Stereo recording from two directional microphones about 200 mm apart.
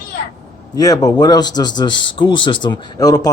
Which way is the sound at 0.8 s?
20° left (ahead or behind).